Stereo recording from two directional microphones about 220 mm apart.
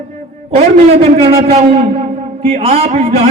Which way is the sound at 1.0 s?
25° right (ahead or behind).